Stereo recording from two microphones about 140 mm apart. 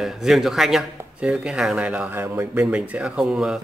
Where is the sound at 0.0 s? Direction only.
Centre (ahead or behind).